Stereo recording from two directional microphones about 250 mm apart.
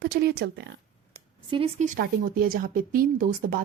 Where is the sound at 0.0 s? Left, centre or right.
Right.